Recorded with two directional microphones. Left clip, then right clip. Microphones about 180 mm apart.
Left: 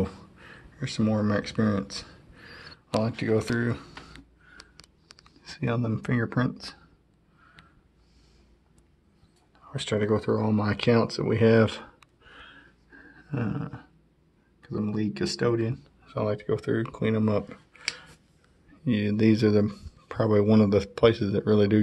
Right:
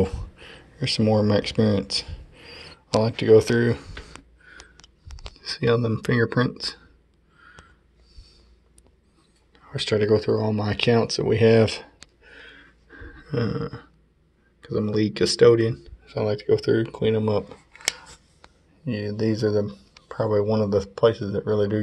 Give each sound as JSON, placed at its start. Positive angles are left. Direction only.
{"t": 0.0, "sound": "speech", "side_deg": 0}
{"t": 1.9, "sound": "a sound", "side_deg": -5}
{"t": 3.0, "sound": "speech", "side_deg": -5}
{"t": 5.4, "sound": "speech", "side_deg": -10}
{"t": 9.7, "sound": "speech", "side_deg": 0}
{"t": 12.9, "sound": "a sound", "side_deg": -15}
{"t": 14.6, "sound": "speech", "side_deg": -15}
{"t": 15.7, "sound": "speech", "side_deg": 0}
{"t": 18.9, "sound": "speech", "side_deg": 25}
{"t": 19.4, "sound": "speech", "side_deg": 55}
{"t": 20.3, "sound": "speech", "side_deg": 40}